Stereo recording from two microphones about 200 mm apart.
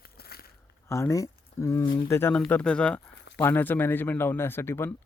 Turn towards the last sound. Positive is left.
turn(degrees=10)  # may be behind; listen again after turning